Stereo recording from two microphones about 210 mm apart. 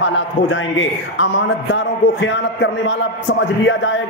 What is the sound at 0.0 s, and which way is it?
A man's voice, 65° left (ahead or behind).